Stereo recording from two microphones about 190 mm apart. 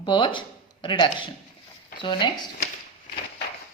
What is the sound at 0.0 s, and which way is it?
A woman's voice, 25° left (ahead or behind).